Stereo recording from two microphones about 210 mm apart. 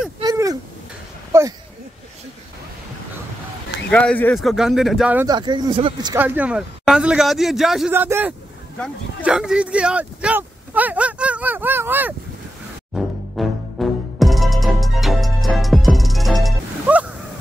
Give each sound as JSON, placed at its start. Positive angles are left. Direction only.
{"t": 0.2, "sound": "a sound", "side_deg": -15}
{"t": 3.9, "sound": "speech", "side_deg": 5}
{"t": 5.3, "sound": "speech", "side_deg": -20}
{"t": 6.1, "sound": "speech", "side_deg": -10}
{"t": 12.9, "sound": "music", "side_deg": 0}